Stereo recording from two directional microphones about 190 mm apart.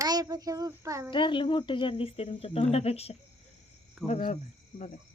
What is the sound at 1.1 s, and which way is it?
Speech, 25° left (ahead or behind).